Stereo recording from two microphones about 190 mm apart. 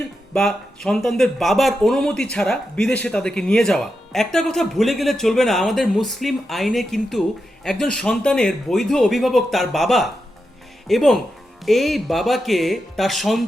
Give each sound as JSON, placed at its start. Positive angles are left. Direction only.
{"t": 0.3, "sound": "speech", "side_deg": 0}